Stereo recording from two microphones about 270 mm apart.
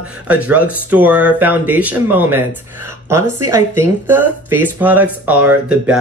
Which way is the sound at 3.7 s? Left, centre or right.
Centre.